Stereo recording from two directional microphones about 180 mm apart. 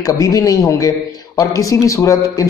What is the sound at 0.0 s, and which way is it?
A man's voice, 20° left (ahead or behind).